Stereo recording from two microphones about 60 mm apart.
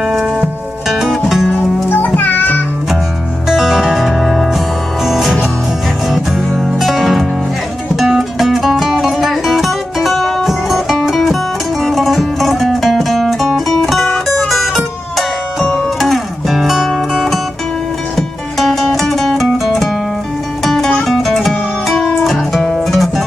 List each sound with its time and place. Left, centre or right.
0.0 s music: centre
1.5 s music: left
3.4 s music: centre
11.8 s zither: centre
14.1 s music: centre